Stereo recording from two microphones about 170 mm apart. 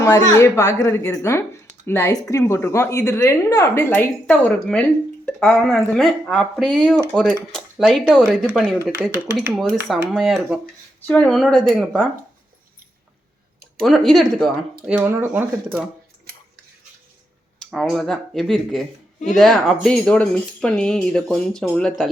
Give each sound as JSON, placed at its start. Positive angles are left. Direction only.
{"t": 0.0, "sound": "speech", "side_deg": 15}
{"t": 8.8, "sound": "speech", "side_deg": -15}
{"t": 9.5, "sound": "speech", "side_deg": 0}
{"t": 13.7, "sound": "speech", "side_deg": 0}
{"t": 17.6, "sound": "speech", "side_deg": 0}